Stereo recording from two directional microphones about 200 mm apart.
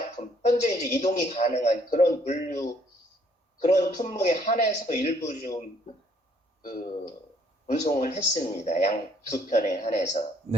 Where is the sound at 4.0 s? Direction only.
30° left (ahead or behind).